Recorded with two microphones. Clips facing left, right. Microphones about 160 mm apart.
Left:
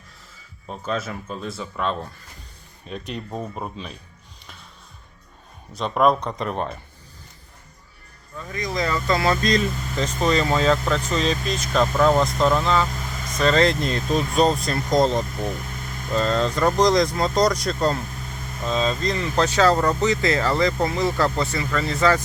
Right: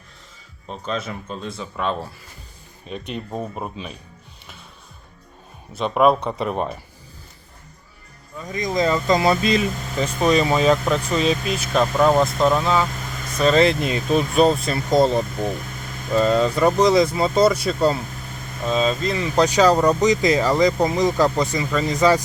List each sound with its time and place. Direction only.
0.7 s speech: 5° left (ahead or behind)
5.7 s speech: 5° right (ahead or behind)
8.4 s speech: 20° right (ahead or behind)